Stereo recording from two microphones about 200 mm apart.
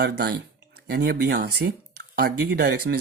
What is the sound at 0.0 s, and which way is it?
Speech, 50° right (ahead or behind).